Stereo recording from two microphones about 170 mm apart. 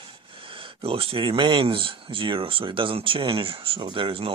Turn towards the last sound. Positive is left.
turn(degrees=-30)  # may be behind; listen again after turning